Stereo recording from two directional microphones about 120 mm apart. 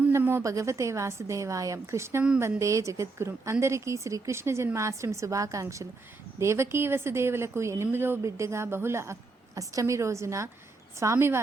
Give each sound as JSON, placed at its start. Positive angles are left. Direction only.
{"t": 0.1, "sound": "speech", "side_deg": -20}